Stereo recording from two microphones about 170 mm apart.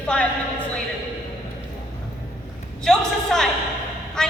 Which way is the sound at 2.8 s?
5° left (ahead or behind).